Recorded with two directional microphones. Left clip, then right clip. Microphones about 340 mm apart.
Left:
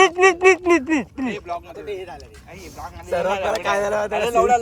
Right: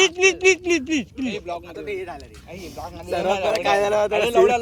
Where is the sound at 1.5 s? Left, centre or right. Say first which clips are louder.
Left 1 dB; centre.